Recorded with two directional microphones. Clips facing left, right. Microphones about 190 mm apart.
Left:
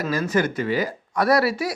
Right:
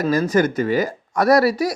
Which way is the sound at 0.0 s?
40° right (ahead or behind).